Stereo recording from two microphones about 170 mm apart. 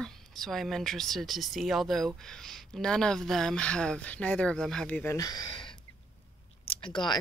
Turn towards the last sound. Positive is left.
turn(degrees=25)  # may be behind; listen again after turning